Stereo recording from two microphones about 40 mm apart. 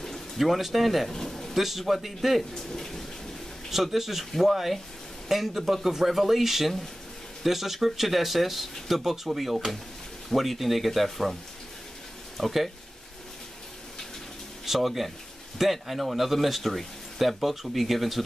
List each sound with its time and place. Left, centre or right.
0.4 s speech: centre
1.1 s a sound: centre
1.5 s speech: centre
2.5 s a sound: centre
3.7 s speech: centre
12.4 s speech: centre
14.6 s speech: centre